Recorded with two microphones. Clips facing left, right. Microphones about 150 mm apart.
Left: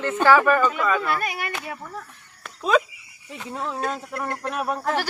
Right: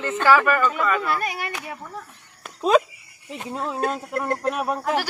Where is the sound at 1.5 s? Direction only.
15° right (ahead or behind).